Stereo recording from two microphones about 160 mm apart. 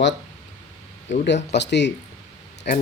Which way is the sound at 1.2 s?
90° left.